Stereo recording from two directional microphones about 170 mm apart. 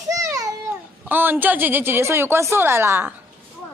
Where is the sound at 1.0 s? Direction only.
10° right (ahead or behind).